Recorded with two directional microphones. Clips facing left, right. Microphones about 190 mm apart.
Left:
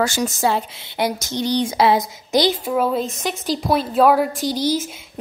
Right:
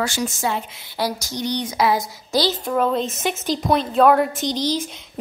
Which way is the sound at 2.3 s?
15° left (ahead or behind).